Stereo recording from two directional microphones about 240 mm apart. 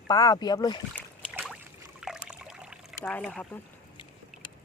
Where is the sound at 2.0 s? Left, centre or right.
Centre.